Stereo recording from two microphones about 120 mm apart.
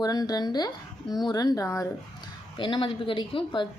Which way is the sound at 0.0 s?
30° left (ahead or behind).